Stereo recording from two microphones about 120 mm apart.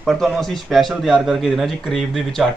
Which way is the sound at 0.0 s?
Centre (ahead or behind).